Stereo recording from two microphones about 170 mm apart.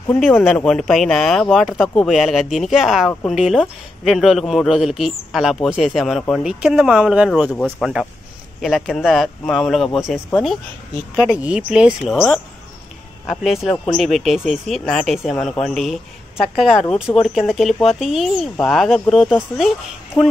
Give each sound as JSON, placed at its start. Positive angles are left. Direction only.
{"t": 0.6, "sound": "speech", "side_deg": 5}
{"t": 3.1, "sound": "speech", "side_deg": 10}
{"t": 3.3, "sound": "speech", "side_deg": 0}
{"t": 13.3, "sound": "speech", "side_deg": 0}
{"t": 20.2, "sound": "speech", "side_deg": 25}